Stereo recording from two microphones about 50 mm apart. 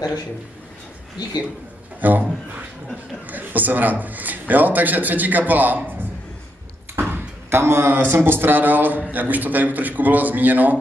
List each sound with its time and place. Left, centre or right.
2.0 s a man's voice: right
3.3 s a man's voice: right
7.0 s a sound: right
7.9 s a man's voice: right